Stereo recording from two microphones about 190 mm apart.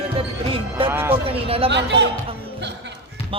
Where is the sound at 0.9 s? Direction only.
10° right (ahead or behind).